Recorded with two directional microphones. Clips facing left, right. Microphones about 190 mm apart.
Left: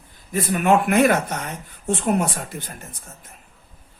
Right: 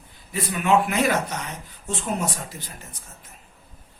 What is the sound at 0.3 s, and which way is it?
Speech, 50° left (ahead or behind).